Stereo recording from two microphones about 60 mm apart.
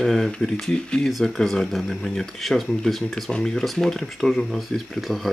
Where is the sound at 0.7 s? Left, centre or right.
Centre.